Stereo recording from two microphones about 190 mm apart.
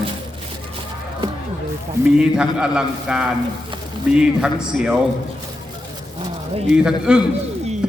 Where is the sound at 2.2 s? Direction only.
5° right (ahead or behind).